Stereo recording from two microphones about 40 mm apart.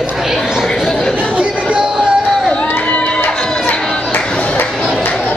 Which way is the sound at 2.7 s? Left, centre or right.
Left.